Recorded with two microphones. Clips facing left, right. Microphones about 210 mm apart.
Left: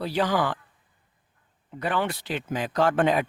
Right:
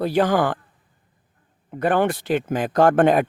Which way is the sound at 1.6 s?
50° right (ahead or behind).